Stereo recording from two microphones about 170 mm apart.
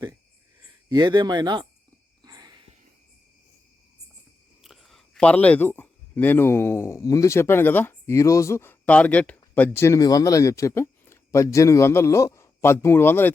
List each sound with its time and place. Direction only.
0.9 s speech: 25° right (ahead or behind)
2.2 s a sound: 25° right (ahead or behind)
4.6 s speech: centre (ahead or behind)